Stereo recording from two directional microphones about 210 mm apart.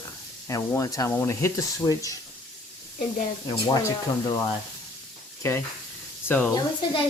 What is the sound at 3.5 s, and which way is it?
Speech, 20° left (ahead or behind).